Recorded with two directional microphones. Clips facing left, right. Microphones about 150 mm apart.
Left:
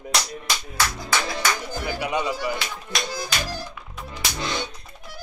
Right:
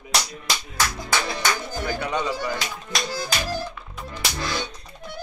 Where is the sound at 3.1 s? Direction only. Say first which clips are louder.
Right 2 dB; 15° left (ahead or behind).